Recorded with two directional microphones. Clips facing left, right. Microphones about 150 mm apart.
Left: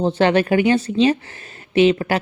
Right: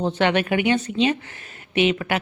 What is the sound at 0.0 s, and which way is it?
Speech, 35° left (ahead or behind).